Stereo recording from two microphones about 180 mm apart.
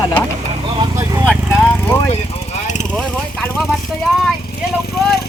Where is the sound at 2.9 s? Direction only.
5° left (ahead or behind).